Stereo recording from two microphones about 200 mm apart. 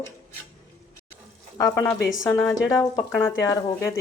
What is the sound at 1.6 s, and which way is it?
Speech, 15° left (ahead or behind).